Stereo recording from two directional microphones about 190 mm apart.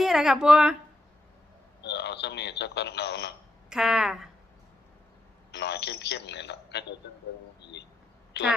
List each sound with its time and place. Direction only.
0.0 s a woman's voice: centre (ahead or behind)
1.8 s speech: 65° left (ahead or behind)
3.7 s a woman's voice: centre (ahead or behind)
5.5 s speech: 60° left (ahead or behind)
7.6 s a sound: 65° left (ahead or behind)